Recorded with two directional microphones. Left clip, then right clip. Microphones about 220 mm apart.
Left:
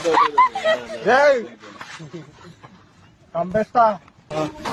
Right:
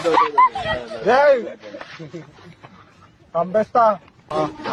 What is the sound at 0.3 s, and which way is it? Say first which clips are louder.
Speech: even; 25° left (ahead or behind).